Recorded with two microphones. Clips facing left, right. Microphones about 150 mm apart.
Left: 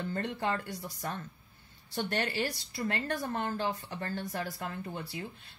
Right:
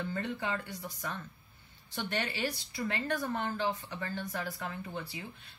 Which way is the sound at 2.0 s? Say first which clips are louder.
Left 3 dB; 45° left (ahead or behind).